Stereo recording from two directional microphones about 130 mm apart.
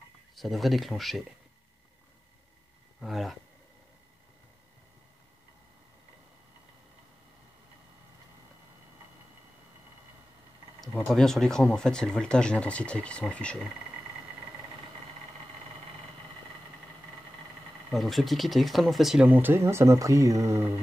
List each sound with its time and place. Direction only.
0.4 s speech: centre (ahead or behind)
3.0 s speech: centre (ahead or behind)
11.0 s speech: 5° left (ahead or behind)
17.9 s speech: centre (ahead or behind)
19.2 s speech: 15° right (ahead or behind)